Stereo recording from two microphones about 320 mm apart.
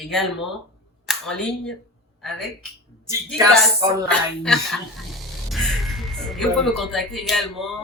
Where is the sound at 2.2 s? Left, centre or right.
Centre.